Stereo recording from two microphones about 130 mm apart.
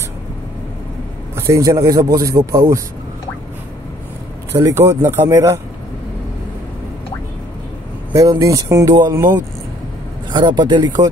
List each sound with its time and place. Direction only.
1.3 s speech: 25° right (ahead or behind)
4.5 s speech: 25° right (ahead or behind)
8.1 s speech: 25° right (ahead or behind)
10.3 s speech: 35° right (ahead or behind)